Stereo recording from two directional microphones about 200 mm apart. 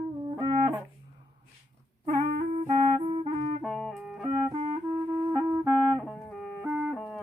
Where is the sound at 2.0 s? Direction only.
40° right (ahead or behind).